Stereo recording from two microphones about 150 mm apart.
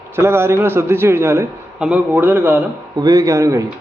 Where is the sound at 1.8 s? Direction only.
5° right (ahead or behind).